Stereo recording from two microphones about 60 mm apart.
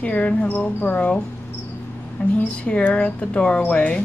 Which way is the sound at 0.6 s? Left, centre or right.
Left.